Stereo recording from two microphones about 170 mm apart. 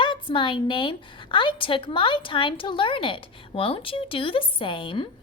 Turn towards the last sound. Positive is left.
turn(degrees=30)  # may be behind; listen again after turning